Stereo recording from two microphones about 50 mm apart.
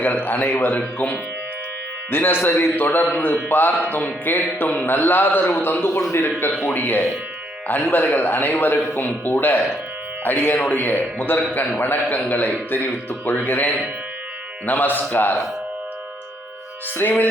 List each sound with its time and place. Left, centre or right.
0.0 s a man's voice: left
6.0 s a man's voice: left
6.7 s a man's voice: left
17.0 s a man's voice: left